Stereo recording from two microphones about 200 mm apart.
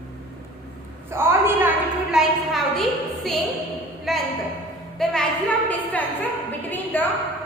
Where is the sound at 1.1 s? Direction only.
10° right (ahead or behind).